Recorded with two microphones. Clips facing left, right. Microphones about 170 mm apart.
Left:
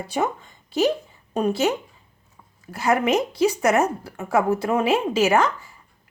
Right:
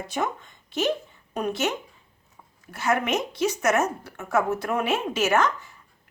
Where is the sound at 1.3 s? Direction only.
30° left (ahead or behind).